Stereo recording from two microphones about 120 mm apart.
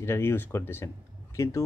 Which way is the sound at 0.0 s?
20° left (ahead or behind).